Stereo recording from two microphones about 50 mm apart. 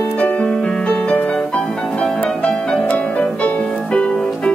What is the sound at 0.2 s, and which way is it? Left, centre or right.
Music, left.